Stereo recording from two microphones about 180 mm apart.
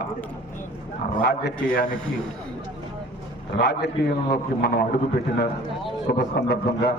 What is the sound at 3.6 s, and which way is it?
A man's voice, 65° left (ahead or behind).